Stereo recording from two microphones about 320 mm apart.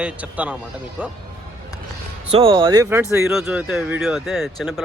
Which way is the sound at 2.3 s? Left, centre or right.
Centre.